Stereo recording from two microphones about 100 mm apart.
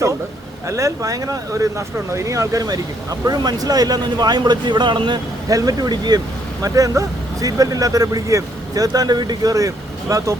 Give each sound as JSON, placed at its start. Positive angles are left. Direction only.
{"t": 0.7, "sound": "speech", "side_deg": -30}
{"t": 5.5, "sound": "speech", "side_deg": -35}